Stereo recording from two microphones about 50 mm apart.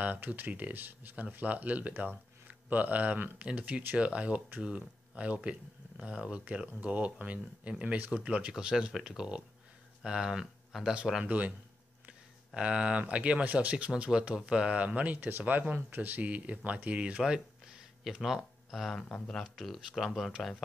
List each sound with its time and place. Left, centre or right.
0.0 s speech: right; by 11.2 s centre
11.2 s speech: right
12.1 s a sound: centre
13.0 s speech: right
17.2 s a sound: centre
19.0 s speech: centre
19.4 s speech: centre